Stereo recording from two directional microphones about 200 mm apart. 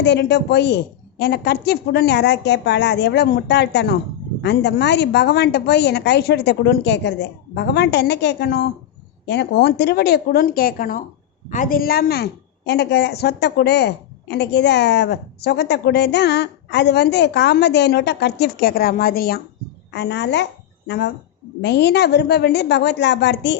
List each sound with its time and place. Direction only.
0.0 s a woman's voice: 60° left (ahead or behind)
19.9 s a woman's voice: 60° left (ahead or behind)